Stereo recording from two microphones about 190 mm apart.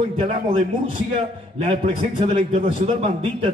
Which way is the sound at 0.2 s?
30° right (ahead or behind).